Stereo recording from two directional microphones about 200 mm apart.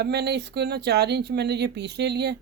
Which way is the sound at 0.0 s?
55° right (ahead or behind).